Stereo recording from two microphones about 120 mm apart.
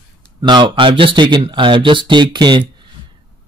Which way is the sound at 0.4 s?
40° right (ahead or behind).